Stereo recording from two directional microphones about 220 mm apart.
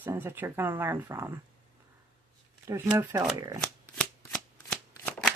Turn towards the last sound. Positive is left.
turn(degrees=5)  # may be behind; listen again after turning